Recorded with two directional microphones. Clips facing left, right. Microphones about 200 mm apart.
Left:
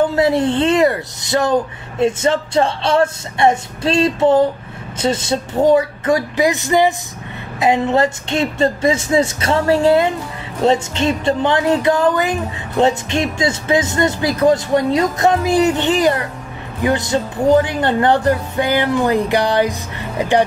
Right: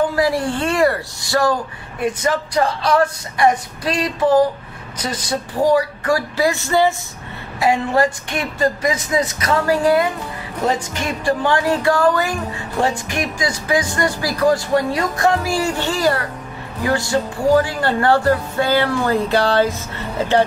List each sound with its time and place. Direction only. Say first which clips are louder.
0.1 s speech: left 4 dB; 25° left (ahead or behind)